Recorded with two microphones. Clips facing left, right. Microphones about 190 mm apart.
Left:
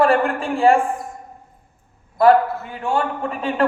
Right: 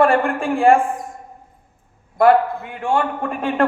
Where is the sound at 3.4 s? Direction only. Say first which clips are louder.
Right 3 dB; 55° right (ahead or behind).